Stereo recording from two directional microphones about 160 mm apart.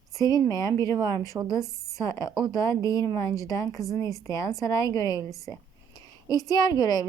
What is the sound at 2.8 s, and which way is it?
A woman's voice, 20° left (ahead or behind).